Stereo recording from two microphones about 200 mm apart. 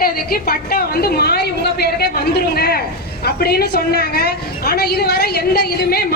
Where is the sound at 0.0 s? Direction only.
50° left (ahead or behind).